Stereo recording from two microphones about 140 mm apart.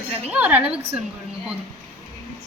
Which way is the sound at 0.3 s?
10° right (ahead or behind).